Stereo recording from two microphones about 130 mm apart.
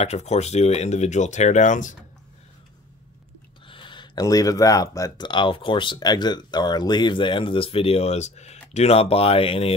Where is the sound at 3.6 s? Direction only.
40° left (ahead or behind).